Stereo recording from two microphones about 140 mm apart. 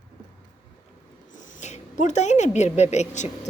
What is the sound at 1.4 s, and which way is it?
Speech, 65° left (ahead or behind).